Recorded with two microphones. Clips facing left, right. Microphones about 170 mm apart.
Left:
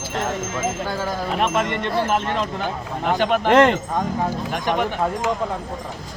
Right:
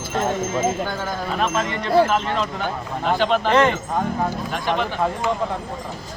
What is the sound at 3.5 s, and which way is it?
Speech, 75° left (ahead or behind).